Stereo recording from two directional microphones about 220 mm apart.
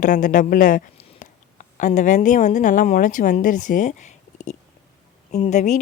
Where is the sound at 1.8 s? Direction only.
35° left (ahead or behind).